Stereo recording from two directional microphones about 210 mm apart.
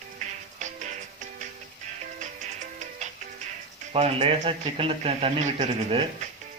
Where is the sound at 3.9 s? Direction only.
30° right (ahead or behind).